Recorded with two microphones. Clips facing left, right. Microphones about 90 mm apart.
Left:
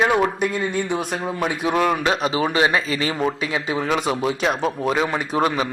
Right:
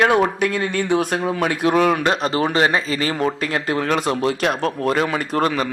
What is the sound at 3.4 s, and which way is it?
Speech, 55° right (ahead or behind).